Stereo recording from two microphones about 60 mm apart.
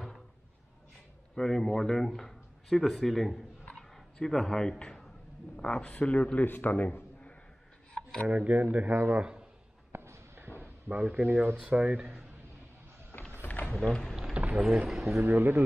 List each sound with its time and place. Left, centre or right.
1.3 s speech: centre
3.7 s a sound: centre
5.6 s speech: centre
6.4 s a man's voice: left
8.3 s speech: right
9.1 s a man's voice: centre
9.9 s a sound: right
10.6 s a sound: right
11.2 s speech: right
11.6 s speech: centre
13.4 s a sound: left
13.7 s speech: centre
14.5 s speech: centre
15.1 s speech: right